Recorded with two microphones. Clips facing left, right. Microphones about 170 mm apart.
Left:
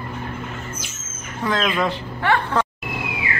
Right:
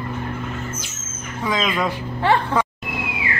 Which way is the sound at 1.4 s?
10° right (ahead or behind).